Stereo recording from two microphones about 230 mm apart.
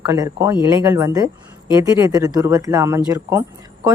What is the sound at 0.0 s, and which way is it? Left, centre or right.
A woman's voice, centre.